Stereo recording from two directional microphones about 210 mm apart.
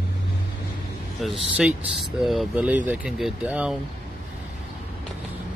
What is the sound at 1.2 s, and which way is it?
Speech, centre (ahead or behind).